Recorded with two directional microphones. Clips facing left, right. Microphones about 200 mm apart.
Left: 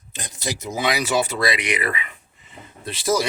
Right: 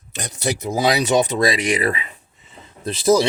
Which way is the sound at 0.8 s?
35° right (ahead or behind).